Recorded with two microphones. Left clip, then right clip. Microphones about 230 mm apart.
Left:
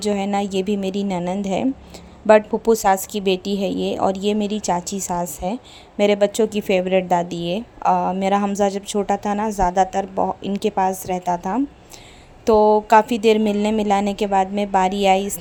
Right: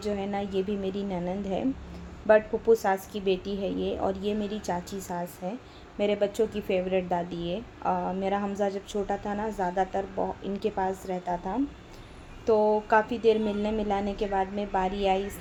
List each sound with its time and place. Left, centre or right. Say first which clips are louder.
0.0 s speech: left 10 dB; left